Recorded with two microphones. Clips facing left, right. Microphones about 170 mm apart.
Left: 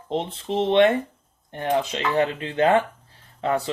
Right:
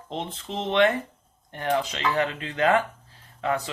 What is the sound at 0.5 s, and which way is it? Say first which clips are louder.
Speech: left 4 dB; 30° left (ahead or behind).